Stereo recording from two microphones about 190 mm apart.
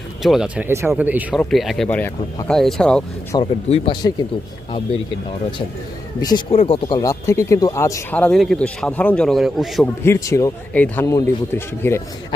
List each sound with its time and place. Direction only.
0.2 s speech: centre (ahead or behind)
3.3 s speech: 25° left (ahead or behind)
6.2 s speech: 25° left (ahead or behind); by 9.9 s centre (ahead or behind)
10.0 s speech: 15° left (ahead or behind)